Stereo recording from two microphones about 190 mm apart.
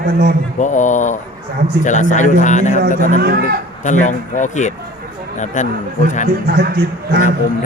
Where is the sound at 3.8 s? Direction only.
40° left (ahead or behind).